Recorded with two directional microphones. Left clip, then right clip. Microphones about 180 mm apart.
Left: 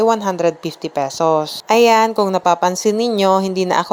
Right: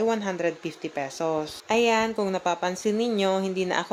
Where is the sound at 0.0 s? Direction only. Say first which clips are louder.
Left 10 dB; 35° left (ahead or behind).